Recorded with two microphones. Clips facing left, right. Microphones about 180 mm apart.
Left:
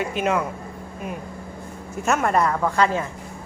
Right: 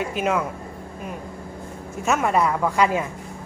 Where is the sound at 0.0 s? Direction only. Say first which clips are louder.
Even; centre (ahead or behind).